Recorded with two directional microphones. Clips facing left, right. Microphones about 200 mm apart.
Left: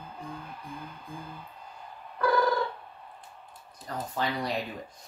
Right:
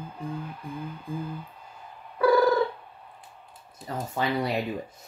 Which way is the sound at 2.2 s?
5° right (ahead or behind).